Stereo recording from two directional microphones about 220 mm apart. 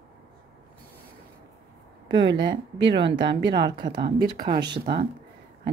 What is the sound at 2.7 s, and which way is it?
Speech, 55° right (ahead or behind).